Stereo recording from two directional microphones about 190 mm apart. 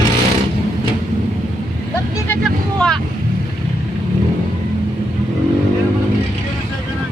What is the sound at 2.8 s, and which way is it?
Boat, 5° left (ahead or behind).